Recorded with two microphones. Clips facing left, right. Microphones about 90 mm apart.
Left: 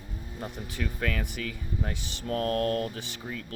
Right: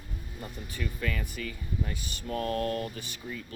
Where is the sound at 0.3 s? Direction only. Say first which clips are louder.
Left 4 dB; 80° left.